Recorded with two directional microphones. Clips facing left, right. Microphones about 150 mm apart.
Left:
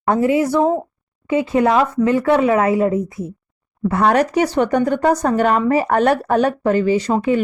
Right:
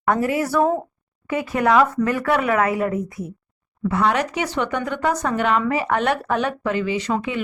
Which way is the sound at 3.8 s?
45° left (ahead or behind).